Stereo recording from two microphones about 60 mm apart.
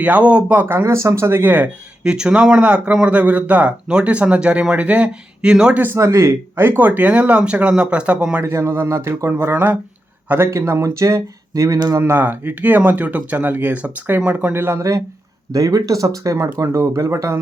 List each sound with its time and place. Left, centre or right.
0.0 s speech: right
0.8 s speech: right
2.0 s speech: centre
6.0 s speech: right
8.5 s speech: right
11.9 s speech: right
14.5 s speech: right
15.5 s speech: right